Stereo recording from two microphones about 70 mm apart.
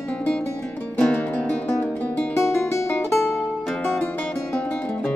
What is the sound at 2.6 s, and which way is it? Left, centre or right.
Music, left.